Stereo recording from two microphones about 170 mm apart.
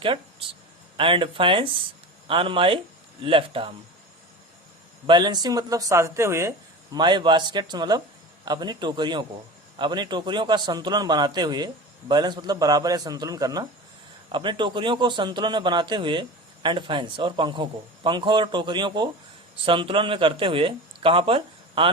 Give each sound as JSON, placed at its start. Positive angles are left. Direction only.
{"t": 0.0, "sound": "speech", "side_deg": -30}
{"t": 5.0, "sound": "a man's voice", "side_deg": -25}
{"t": 6.9, "sound": "a man's voice", "side_deg": -25}